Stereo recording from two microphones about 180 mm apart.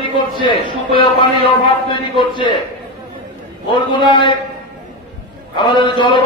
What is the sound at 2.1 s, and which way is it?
Speech, 25° left (ahead or behind).